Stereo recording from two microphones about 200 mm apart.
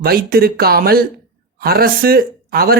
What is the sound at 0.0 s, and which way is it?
Speech, 50° right (ahead or behind).